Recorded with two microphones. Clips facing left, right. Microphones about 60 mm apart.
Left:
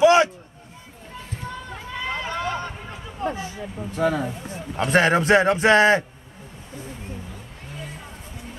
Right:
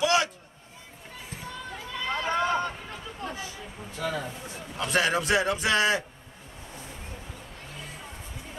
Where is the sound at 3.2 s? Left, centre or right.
Left.